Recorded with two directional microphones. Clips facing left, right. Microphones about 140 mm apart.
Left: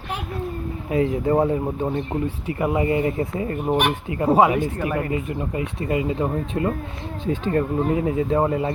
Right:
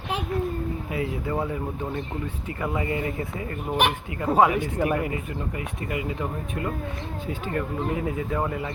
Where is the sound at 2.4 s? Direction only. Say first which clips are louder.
Left 6 dB; 20° left (ahead or behind).